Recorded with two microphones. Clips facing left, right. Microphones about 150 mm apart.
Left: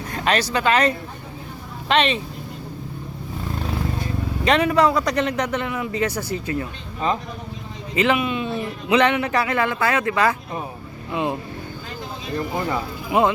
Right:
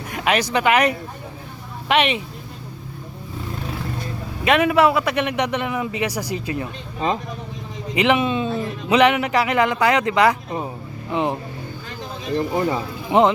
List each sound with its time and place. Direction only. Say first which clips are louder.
0.1 s a sound: right 1 dB; 15° right (ahead or behind)
0.5 s a man's voice: right 2 dB; 15° right (ahead or behind)
4.4 s a man's voice: right 2 dB; 5° right (ahead or behind); by 8.4 s 25° right (ahead or behind)
8.9 s a man's voice: right 2 dB; 15° right (ahead or behind)
12.4 s speech: right 3 dB; 25° right (ahead or behind)